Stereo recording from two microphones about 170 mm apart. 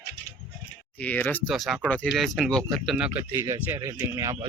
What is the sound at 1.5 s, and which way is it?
Speech, centre (ahead or behind).